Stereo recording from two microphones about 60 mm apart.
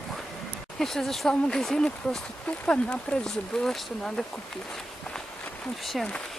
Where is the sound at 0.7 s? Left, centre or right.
Centre.